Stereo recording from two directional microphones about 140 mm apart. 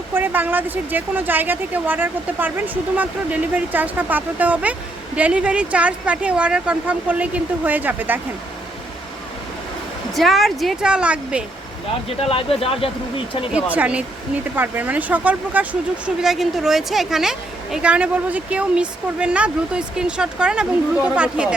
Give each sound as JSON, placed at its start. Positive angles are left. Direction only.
{"t": 0.1, "sound": "speech", "side_deg": -15}
{"t": 3.5, "sound": "speech", "side_deg": -10}
{"t": 10.2, "sound": "speech", "side_deg": 0}
{"t": 12.0, "sound": "speech", "side_deg": 40}
{"t": 13.5, "sound": "speech", "side_deg": -10}